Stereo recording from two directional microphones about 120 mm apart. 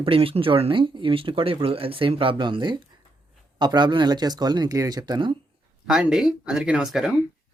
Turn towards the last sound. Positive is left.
turn(degrees=-5)  # may be behind; listen again after turning